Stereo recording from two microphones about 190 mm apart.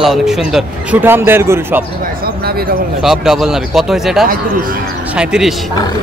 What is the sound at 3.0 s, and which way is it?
A man's voice, centre (ahead or behind).